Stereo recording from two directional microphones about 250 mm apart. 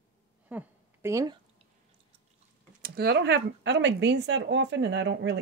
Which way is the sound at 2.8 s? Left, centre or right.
Right.